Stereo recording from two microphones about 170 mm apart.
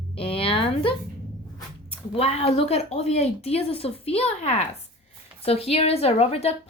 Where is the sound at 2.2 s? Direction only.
35° left (ahead or behind).